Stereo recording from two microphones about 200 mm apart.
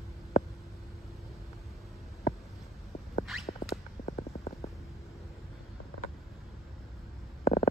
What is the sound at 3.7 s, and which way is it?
Stomach rumble, 30° left (ahead or behind).